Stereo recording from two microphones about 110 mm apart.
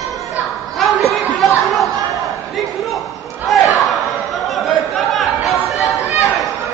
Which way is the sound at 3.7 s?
Centre (ahead or behind).